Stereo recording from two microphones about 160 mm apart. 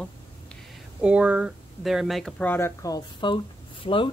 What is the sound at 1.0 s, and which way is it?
Speech, 5° right (ahead or behind).